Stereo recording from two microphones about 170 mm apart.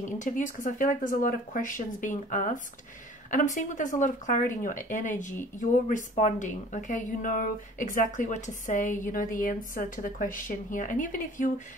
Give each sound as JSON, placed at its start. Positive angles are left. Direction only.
{"t": 0.0, "sound": "a woman's voice", "side_deg": 50}